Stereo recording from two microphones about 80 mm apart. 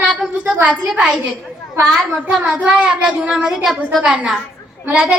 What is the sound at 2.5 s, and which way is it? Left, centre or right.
A woman's voice, centre.